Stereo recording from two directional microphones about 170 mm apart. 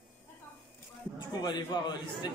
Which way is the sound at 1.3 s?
25° left (ahead or behind).